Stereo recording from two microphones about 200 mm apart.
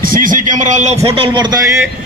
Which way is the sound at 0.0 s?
45° right (ahead or behind).